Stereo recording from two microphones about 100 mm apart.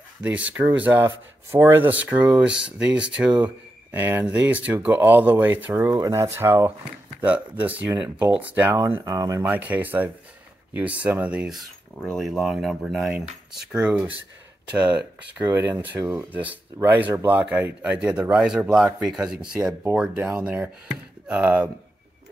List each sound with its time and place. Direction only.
0.2 s speech: 15° right (ahead or behind)
5.9 s speech: 30° right (ahead or behind)
7.2 s speech: 15° right (ahead or behind)
9.0 s speech: 35° right (ahead or behind)
9.4 s speech: 15° right (ahead or behind)